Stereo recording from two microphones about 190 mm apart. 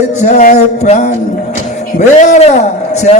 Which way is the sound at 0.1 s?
35° left (ahead or behind).